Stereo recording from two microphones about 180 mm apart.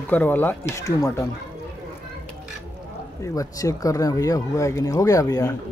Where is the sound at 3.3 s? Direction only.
20° left (ahead or behind).